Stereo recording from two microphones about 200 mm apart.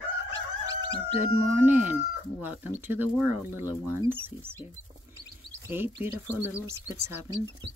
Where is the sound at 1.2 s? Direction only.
10° right (ahead or behind).